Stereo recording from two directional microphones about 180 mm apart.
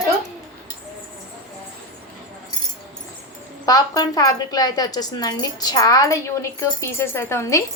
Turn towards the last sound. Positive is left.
turn(degrees=15)  # may be behind; listen again after turning